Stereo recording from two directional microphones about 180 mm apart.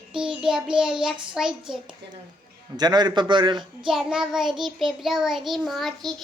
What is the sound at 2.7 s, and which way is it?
Speech, 25° right (ahead or behind).